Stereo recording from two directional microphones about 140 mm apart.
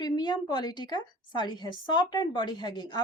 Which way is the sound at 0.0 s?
30° left (ahead or behind).